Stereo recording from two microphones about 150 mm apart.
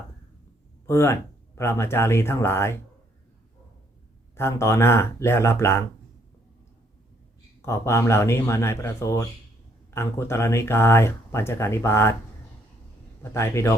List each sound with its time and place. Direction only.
0.9 s speech: 15° left (ahead or behind)
4.4 s speech: 15° left (ahead or behind)
7.6 s speech: 15° left (ahead or behind)
13.3 s speech: 15° left (ahead or behind)